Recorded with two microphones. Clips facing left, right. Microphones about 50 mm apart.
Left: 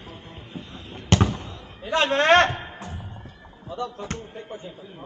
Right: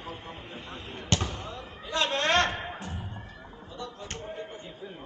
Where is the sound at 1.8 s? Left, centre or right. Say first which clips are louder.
Left 7 dB; left.